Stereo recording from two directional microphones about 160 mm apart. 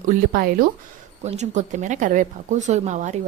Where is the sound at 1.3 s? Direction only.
45° right (ahead or behind).